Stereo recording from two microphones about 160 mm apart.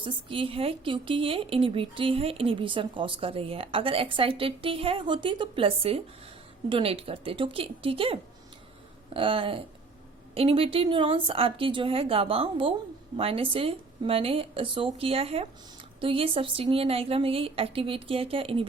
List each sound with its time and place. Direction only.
0.0 s speech: 35° right (ahead or behind)